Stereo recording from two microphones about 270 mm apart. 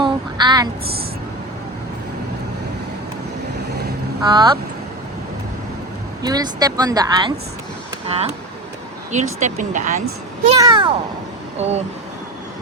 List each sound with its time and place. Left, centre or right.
0.0 s a sound: centre
4.2 s speech: centre
6.2 s speech: centre